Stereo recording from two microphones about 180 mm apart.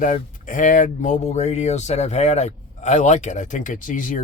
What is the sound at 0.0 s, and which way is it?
Speech, 45° left (ahead or behind).